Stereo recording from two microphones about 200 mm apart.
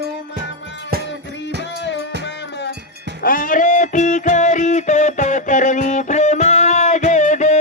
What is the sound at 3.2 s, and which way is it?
Music, 45° left (ahead or behind).